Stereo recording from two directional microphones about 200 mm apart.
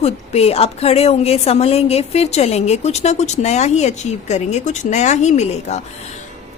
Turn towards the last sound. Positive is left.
turn(degrees=35)  # may be behind; listen again after turning